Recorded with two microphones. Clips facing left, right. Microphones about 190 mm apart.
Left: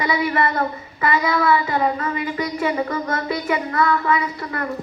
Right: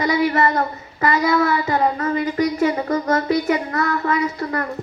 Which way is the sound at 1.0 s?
45° right (ahead or behind).